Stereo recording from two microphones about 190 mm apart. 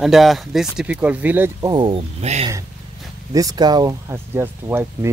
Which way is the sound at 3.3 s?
20° right (ahead or behind).